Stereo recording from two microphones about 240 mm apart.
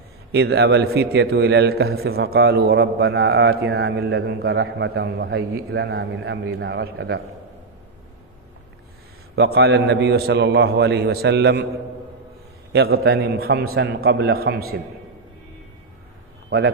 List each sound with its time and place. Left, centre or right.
0.3 s a man's voice: right
9.3 s a man's voice: right
12.7 s a man's voice: right
16.5 s a man's voice: right